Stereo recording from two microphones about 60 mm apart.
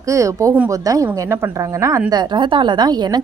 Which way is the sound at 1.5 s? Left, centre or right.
Right.